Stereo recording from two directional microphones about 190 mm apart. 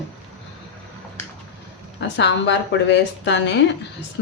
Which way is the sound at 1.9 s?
70° left (ahead or behind).